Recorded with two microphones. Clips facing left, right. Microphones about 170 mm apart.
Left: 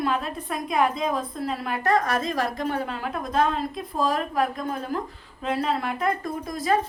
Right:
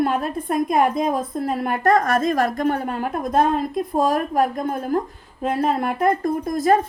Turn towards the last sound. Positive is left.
turn(degrees=-50)  # may be behind; listen again after turning